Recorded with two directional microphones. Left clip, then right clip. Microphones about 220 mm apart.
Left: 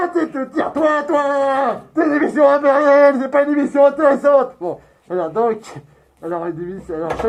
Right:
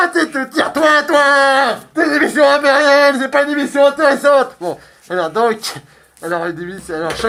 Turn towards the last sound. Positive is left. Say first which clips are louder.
# right 3 dB
turn(degrees=-20)  # may be behind; listen again after turning